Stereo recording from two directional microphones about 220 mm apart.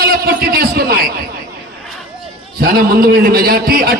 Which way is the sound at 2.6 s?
40° right (ahead or behind).